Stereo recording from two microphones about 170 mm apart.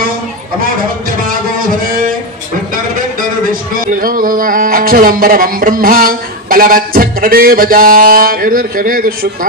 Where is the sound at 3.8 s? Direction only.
55° right (ahead or behind).